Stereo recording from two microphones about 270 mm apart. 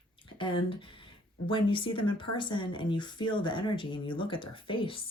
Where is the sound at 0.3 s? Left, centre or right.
Centre.